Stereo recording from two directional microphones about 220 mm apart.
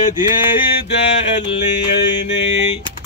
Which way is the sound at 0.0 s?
35° left (ahead or behind).